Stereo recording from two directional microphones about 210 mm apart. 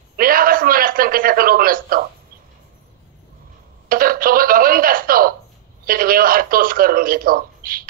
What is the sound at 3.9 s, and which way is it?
A man's voice, 45° right (ahead or behind).